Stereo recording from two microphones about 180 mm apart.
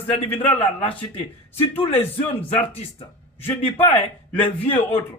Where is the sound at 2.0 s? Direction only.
10° left (ahead or behind).